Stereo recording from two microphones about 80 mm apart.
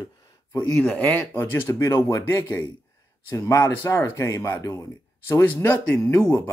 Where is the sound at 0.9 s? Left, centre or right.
Left.